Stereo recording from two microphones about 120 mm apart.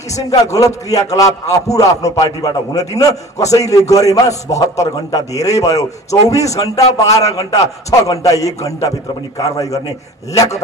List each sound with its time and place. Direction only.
0.5 s a man's voice: 30° left (ahead or behind)